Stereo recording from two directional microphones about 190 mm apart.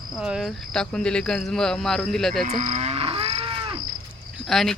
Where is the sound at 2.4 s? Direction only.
40° right (ahead or behind).